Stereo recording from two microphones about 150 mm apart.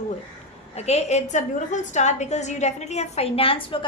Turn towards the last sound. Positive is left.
turn(degrees=35)  # may be behind; listen again after turning